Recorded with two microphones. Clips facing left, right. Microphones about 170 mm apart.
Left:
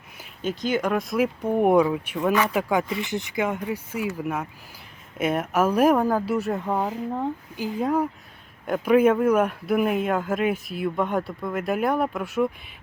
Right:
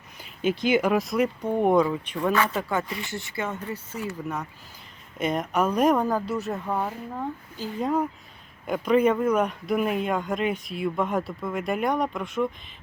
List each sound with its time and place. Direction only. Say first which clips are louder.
0.4 s speech: right 2 dB; 10° right (ahead or behind)
6.7 s speech: left 3 dB; 15° left (ahead or behind)
7.8 s speech: left 1 dB; centre (ahead or behind)